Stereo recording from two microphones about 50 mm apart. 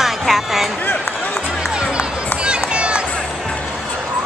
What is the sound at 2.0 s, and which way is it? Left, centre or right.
Run, right.